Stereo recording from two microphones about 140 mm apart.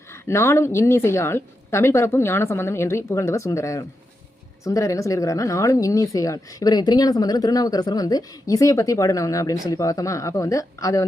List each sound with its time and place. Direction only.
0.1 s a woman's voice: 20° left (ahead or behind)